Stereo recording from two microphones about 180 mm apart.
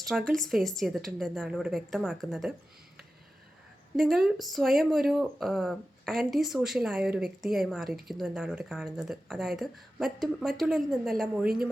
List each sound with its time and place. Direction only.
0.1 s speech: centre (ahead or behind)
3.9 s speech: centre (ahead or behind)